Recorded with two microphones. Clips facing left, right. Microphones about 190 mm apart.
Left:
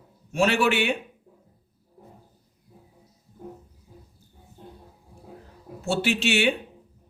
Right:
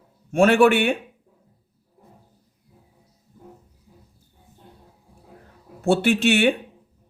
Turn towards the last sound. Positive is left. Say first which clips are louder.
# right 5 dB
turn(degrees=-55)  # may be behind; listen again after turning